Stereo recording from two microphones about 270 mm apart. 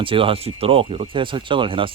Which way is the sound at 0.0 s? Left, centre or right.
Centre.